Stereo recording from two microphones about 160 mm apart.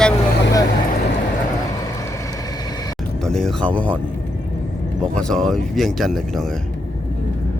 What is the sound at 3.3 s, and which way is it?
Speech, 5° left (ahead or behind).